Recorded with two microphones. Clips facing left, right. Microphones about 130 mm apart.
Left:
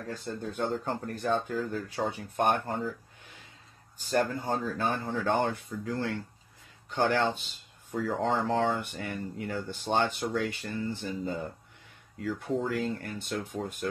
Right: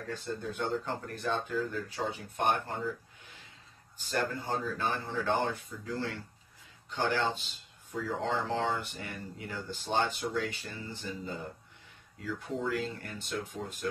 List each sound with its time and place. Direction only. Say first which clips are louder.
0.5 s speech: left 3 dB; 45° left (ahead or behind)
4.1 s speech: left 4 dB; 45° left (ahead or behind)